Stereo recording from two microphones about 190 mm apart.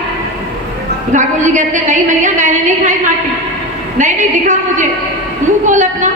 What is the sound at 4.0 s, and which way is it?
A woman's voice, 40° right (ahead or behind).